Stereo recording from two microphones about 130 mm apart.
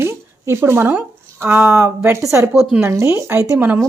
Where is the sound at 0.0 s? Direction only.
20° right (ahead or behind).